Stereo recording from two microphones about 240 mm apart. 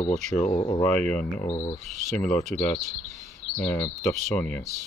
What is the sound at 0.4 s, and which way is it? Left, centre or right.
Speech, left.